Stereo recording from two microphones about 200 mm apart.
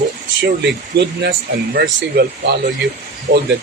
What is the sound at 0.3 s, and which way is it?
Speech, 60° right (ahead or behind).